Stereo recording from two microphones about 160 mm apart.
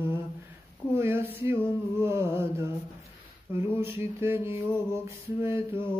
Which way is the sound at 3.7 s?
15° right (ahead or behind).